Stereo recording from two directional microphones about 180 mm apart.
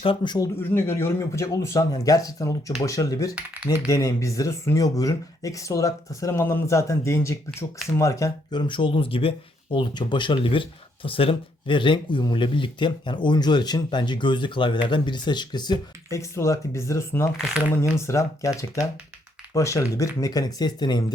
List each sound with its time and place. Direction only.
0.0 s speech: 25° left (ahead or behind)
3.3 s speech: 10° right (ahead or behind)
3.8 s speech: 15° left (ahead or behind)
17.3 s speech: centre (ahead or behind)
17.7 s speech: 15° left (ahead or behind)